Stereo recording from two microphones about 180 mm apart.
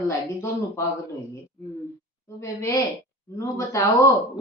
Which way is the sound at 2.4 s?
15° left (ahead or behind).